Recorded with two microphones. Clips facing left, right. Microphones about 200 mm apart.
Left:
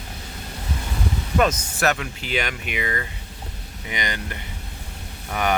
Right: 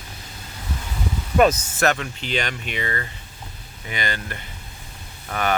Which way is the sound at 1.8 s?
5° left (ahead or behind).